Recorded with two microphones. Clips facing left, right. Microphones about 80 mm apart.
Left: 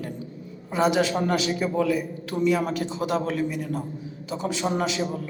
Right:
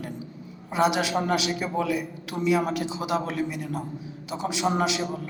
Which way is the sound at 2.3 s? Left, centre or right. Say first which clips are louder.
Left 1 dB; centre.